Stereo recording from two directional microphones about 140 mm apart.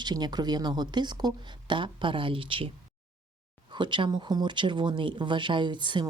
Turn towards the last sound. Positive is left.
turn(degrees=-35)  # may be behind; listen again after turning